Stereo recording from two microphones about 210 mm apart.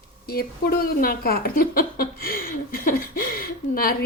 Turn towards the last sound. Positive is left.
turn(degrees=45)  # may be behind; listen again after turning